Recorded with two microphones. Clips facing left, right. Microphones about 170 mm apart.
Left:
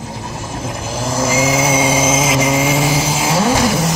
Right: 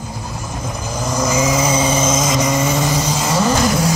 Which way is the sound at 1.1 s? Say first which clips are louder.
Left 1 dB; 5° left (ahead or behind).